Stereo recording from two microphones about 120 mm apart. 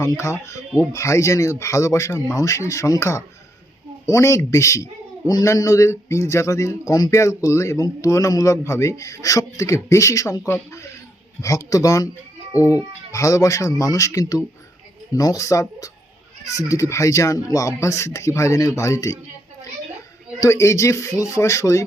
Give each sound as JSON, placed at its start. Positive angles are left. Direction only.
{"t": 0.0, "sound": "a man's voice", "side_deg": 25}
{"t": 20.4, "sound": "a man's voice", "side_deg": 25}